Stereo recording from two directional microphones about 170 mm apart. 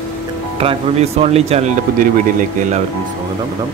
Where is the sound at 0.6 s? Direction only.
35° right (ahead or behind).